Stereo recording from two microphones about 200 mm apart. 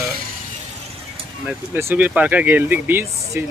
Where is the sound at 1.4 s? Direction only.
10° right (ahead or behind).